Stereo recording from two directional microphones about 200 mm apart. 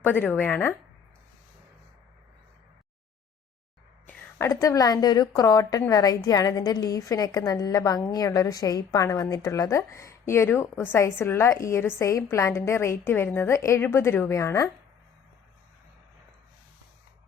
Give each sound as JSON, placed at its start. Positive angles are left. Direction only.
{"t": 0.0, "sound": "a woman's voice", "side_deg": 10}
{"t": 4.0, "sound": "a woman's voice", "side_deg": 15}